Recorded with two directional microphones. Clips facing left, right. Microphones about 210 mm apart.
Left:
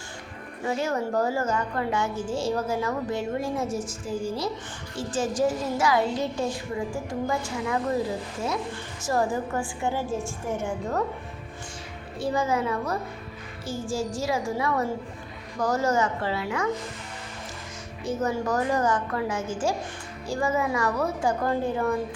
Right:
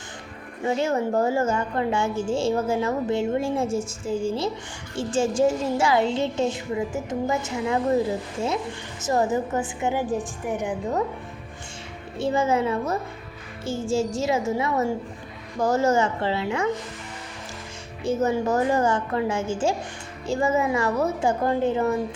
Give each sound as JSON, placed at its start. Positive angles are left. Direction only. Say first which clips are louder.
{"t": 0.6, "sound": "a woman's voice", "louder": "right 4 dB", "side_deg": -25}
{"t": 9.0, "sound": "a woman's voice", "louder": "right 3 dB", "side_deg": -20}
{"t": 12.2, "sound": "a woman's voice", "louder": "right 3 dB", "side_deg": -25}
{"t": 18.0, "sound": "a woman's voice", "louder": "right 4 dB", "side_deg": -25}